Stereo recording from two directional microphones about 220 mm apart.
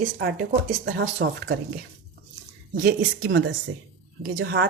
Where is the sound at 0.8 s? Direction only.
50° right (ahead or behind).